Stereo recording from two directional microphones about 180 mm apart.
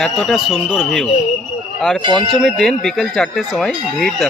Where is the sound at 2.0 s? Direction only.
25° right (ahead or behind).